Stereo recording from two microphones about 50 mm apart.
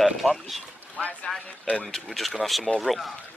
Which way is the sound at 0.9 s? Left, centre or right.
Left.